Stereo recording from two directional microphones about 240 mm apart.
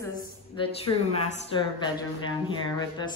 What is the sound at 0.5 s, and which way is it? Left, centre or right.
Speech, left.